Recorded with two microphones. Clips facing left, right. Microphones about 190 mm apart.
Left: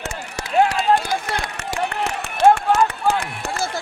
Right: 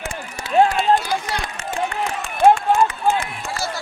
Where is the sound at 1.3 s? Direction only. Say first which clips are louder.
Even; 65° left (ahead or behind).